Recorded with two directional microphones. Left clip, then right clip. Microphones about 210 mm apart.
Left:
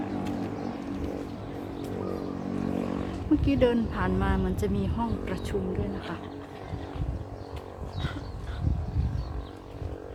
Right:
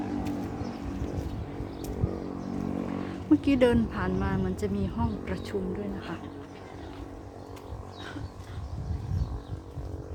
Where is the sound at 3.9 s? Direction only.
5° right (ahead or behind).